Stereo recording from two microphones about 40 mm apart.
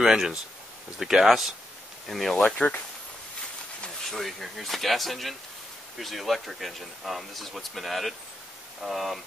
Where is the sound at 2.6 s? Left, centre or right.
Left.